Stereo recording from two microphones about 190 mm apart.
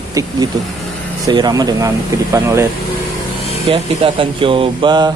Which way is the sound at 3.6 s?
25° right (ahead or behind).